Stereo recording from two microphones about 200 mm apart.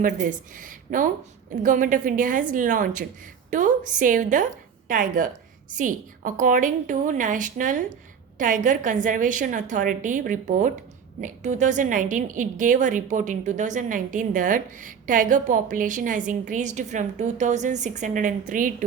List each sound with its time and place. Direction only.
0.0 s a woman's voice: 40° right (ahead or behind)